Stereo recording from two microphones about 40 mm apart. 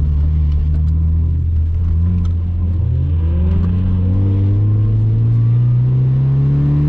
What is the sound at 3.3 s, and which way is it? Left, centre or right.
Vehicle, right.